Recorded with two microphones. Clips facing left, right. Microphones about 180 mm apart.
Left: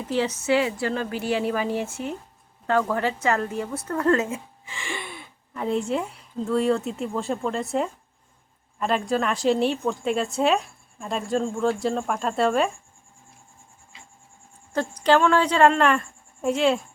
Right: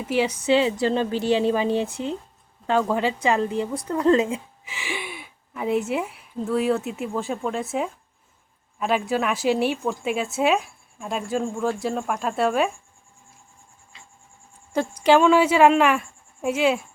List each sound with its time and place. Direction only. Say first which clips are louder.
0.0 s a woman's voice: right 2 dB; 10° right (ahead or behind)
14.7 s a woman's voice: right 2 dB; 10° right (ahead or behind)